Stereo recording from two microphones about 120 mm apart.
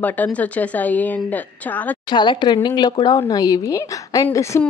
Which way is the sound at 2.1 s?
40° left (ahead or behind).